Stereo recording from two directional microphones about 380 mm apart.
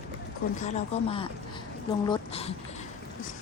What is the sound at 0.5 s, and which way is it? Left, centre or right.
Speech, centre.